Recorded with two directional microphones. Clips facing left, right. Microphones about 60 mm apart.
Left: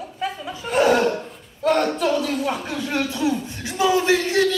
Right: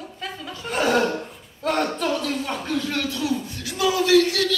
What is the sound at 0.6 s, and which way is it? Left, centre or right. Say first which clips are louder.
Chuckle: left 4 dB; centre.